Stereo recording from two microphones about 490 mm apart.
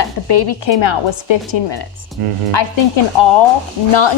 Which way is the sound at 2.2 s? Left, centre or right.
Right.